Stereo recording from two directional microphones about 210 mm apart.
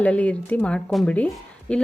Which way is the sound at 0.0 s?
5° left (ahead or behind).